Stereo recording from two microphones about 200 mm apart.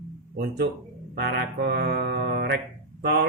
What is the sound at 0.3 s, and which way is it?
Mantra, 55° right (ahead or behind).